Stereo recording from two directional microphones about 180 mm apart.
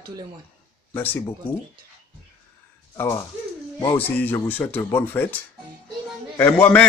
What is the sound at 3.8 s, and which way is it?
Speech, 25° left (ahead or behind).